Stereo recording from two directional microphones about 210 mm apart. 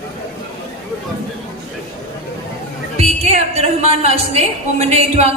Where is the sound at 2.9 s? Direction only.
30° right (ahead or behind).